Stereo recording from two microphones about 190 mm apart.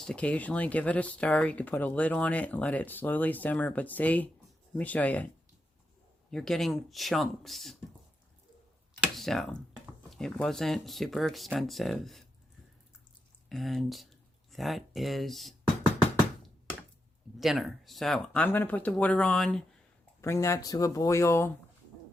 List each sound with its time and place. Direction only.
0.0 s speech: 5° left (ahead or behind)
6.3 s speech: centre (ahead or behind)
9.1 s speech: centre (ahead or behind)
13.5 s speech: centre (ahead or behind)
17.4 s speech: centre (ahead or behind)
20.2 s speech: 15° left (ahead or behind)